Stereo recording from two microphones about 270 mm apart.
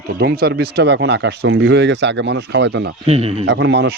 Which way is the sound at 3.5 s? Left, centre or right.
Right.